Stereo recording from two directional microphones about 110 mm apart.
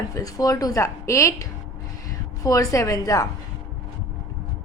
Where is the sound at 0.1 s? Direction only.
30° left (ahead or behind).